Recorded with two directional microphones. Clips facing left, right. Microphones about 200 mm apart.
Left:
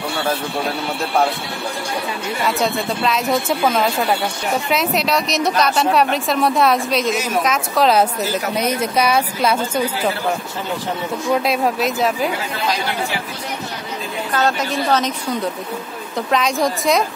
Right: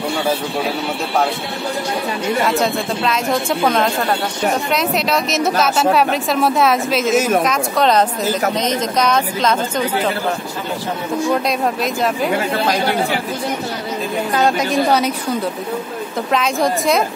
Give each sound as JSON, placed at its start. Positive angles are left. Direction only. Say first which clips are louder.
{"t": 2.4, "sound": "a woman's voice", "louder": "left 2 dB", "side_deg": 0}
{"t": 7.2, "sound": "a woman's voice", "louder": "right 6 dB", "side_deg": -50}
{"t": 7.4, "sound": "a woman's voice", "louder": "right 1 dB", "side_deg": 0}
{"t": 11.3, "sound": "a woman's voice", "louder": "even", "side_deg": 0}
{"t": 14.3, "sound": "a woman's voice", "louder": "right 3 dB", "side_deg": -15}
{"t": 16.3, "sound": "a woman's voice", "louder": "right 1 dB", "side_deg": 0}